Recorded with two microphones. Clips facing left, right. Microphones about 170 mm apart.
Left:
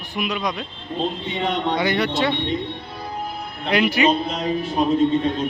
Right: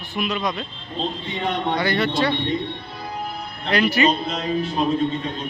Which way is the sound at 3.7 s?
15° left (ahead or behind).